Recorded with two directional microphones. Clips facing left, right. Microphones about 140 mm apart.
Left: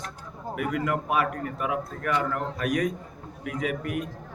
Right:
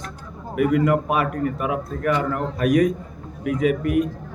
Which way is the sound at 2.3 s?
10° right (ahead or behind).